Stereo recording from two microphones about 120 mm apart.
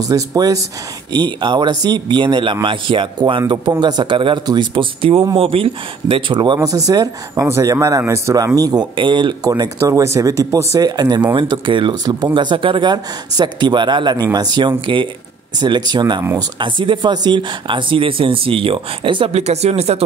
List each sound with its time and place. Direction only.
0.0 s speech: 30° right (ahead or behind)
9.5 s speech: 25° right (ahead or behind); by 20.0 s 60° right (ahead or behind)